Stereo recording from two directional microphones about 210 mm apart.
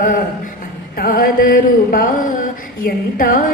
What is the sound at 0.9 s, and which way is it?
Mantra, 45° left (ahead or behind).